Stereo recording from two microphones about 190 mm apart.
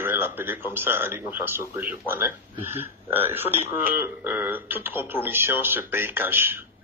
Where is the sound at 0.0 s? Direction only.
10° right (ahead or behind).